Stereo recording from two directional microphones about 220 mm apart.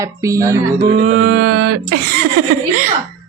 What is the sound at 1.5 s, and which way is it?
Speech, 90° right.